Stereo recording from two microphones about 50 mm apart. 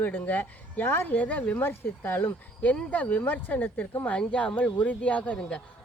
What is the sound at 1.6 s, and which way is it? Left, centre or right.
Speech, left.